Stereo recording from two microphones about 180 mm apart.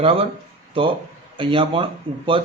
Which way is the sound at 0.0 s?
30° right (ahead or behind).